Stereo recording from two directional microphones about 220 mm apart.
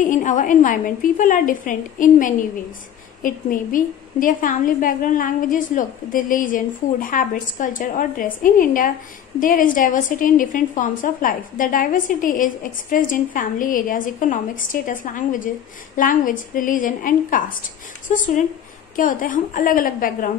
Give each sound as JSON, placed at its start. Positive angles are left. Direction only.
{"t": 0.0, "sound": "a woman's voice", "side_deg": 35}